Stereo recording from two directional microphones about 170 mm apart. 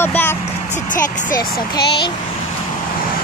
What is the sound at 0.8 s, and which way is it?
Speech, 50° left (ahead or behind).